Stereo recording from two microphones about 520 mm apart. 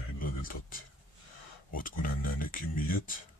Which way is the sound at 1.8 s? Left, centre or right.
Centre.